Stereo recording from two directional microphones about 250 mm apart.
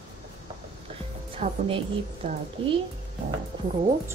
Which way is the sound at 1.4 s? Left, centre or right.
Right.